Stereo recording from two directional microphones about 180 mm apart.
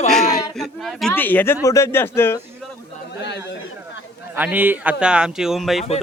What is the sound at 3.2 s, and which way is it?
Speech, 70° left (ahead or behind).